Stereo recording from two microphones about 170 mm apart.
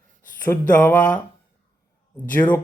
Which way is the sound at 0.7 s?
10° left (ahead or behind).